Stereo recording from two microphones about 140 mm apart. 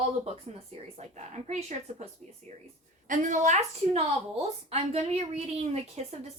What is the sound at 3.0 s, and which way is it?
A woman's voice, 65° right (ahead or behind).